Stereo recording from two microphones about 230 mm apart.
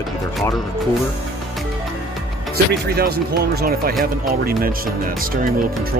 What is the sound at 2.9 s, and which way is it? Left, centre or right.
Speech, right.